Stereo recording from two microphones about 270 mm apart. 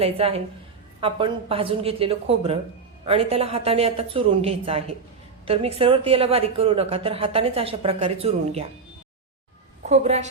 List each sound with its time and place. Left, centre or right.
0.0 s a woman's voice: right
9.8 s a woman's voice: right